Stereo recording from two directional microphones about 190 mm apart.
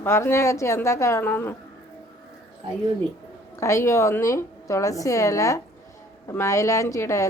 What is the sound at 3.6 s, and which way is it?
A woman's voice, 15° left (ahead or behind).